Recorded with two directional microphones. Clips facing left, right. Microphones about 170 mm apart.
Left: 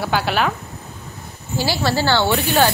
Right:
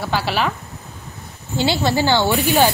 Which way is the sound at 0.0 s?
Centre (ahead or behind).